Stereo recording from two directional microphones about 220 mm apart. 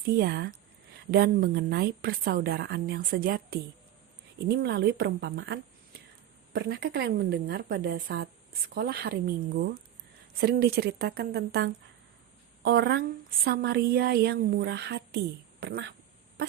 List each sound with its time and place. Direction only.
0.0 s a woman's voice: 45° right (ahead or behind)
10.3 s a woman's voice: 45° right (ahead or behind)